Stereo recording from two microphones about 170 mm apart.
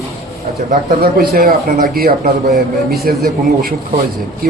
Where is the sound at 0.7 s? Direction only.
65° right (ahead or behind).